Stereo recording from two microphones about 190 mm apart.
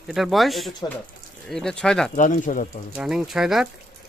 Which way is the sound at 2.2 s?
45° left (ahead or behind).